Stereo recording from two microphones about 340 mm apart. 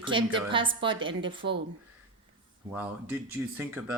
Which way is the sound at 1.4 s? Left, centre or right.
Right.